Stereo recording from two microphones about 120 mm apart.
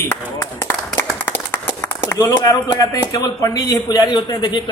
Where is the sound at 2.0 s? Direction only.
30° left (ahead or behind).